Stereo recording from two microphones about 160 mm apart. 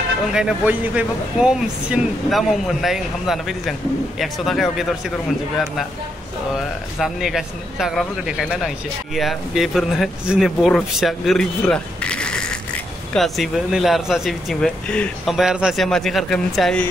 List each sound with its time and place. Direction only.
0.3 s speech: 5° right (ahead or behind)
7.0 s speech: centre (ahead or behind)